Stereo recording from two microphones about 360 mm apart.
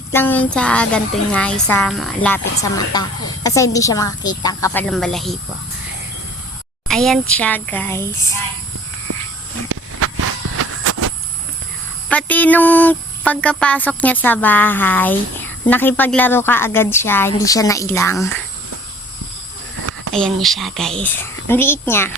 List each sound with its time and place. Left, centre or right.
0.1 s a woman's voice: centre
6.8 s speech: centre
10.0 s a sound: right
12.0 s a woman's voice: centre
19.8 s a sound: right
20.1 s speech: centre